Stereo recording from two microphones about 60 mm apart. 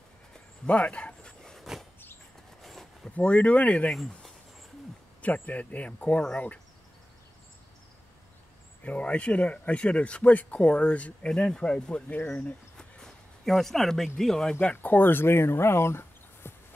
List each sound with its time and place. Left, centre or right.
0.7 s speech: centre
1.4 s a sound: centre
3.2 s speech: left
5.2 s speech: left
8.8 s speech: left
12.2 s speech: left
12.7 s a sound: centre
14.8 s speech: left